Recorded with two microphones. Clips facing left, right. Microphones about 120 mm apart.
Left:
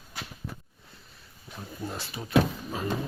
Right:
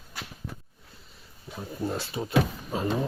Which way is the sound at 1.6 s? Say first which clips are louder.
Right 5 dB; 20° right (ahead or behind).